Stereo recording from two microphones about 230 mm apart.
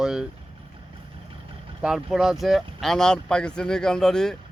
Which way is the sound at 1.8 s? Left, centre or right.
Centre.